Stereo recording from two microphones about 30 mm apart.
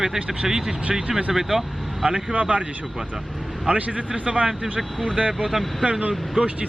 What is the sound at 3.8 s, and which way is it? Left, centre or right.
Speech, right.